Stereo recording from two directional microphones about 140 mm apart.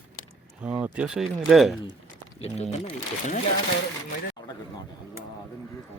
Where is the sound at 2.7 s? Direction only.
50° left (ahead or behind).